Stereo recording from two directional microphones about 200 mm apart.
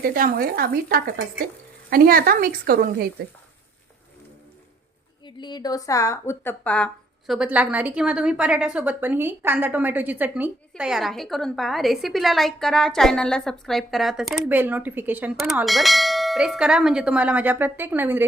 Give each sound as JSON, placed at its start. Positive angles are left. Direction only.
{"t": 0.0, "sound": "speech", "side_deg": -45}
{"t": 5.2, "sound": "a woman's voice", "side_deg": 20}
{"t": 7.3, "sound": "a woman's voice", "side_deg": -5}